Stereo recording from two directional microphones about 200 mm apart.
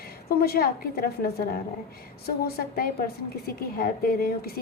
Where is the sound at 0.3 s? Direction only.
50° left (ahead or behind).